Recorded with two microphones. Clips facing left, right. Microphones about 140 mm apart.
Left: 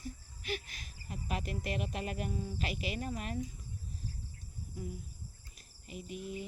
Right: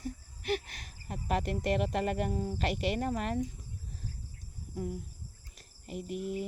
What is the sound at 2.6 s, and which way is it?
Speech, 75° right (ahead or behind).